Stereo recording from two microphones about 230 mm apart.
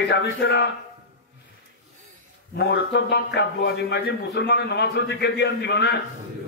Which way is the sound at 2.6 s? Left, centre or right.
Left.